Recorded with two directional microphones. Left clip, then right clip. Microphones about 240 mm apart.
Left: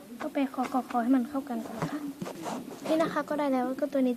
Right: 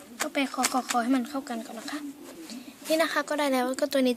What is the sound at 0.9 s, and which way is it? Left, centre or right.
A woman's voice, right.